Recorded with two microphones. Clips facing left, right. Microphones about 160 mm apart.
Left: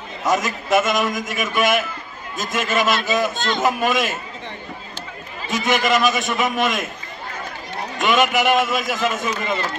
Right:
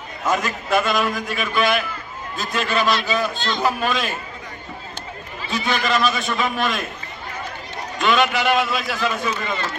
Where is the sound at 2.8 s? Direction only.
45° left (ahead or behind).